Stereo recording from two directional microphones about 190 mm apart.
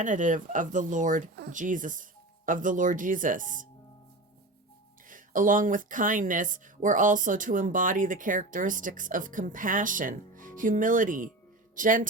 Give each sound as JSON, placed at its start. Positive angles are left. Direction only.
{"t": 0.0, "sound": "speech", "side_deg": -40}
{"t": 5.0, "sound": "speech", "side_deg": -45}